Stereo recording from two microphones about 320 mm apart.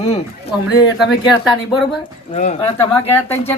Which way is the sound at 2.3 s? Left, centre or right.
Centre.